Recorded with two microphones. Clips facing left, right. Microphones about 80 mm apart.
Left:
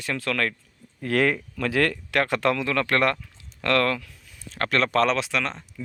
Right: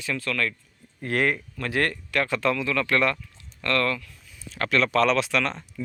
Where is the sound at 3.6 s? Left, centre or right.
Left.